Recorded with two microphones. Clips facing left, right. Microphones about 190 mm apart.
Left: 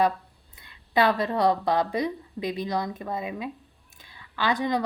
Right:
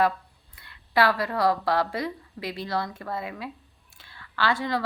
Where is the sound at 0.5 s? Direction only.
20° left (ahead or behind).